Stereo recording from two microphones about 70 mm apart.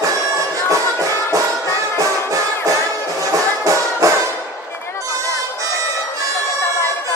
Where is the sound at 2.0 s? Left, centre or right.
Right.